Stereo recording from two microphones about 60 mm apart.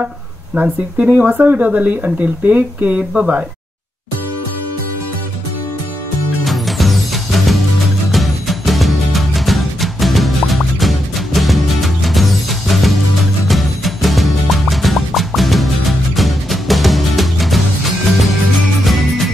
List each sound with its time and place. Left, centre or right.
0.6 s speech: right
3.1 s speech: centre
6.4 s music: centre
18.9 s music: centre